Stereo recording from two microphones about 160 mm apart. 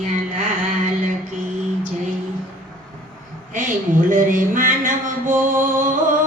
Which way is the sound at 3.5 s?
55° right (ahead or behind).